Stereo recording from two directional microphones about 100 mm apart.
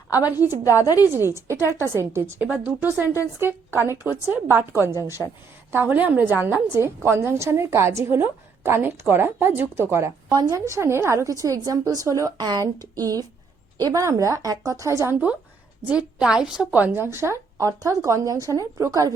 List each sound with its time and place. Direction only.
0.3 s a woman's voice: 20° right (ahead or behind)
0.6 s a woman's voice: 30° left (ahead or behind)
1.0 s a woman's voice: 25° right (ahead or behind)
5.2 s a woman's voice: 10° left (ahead or behind)
5.7 s a woman's voice: 20° right (ahead or behind)
10.2 s a woman's voice: 45° right (ahead or behind)
10.7 s a woman's voice: 25° right (ahead or behind)
15.9 s a woman's voice: 10° right (ahead or behind); by 19.1 s 35° right (ahead or behind)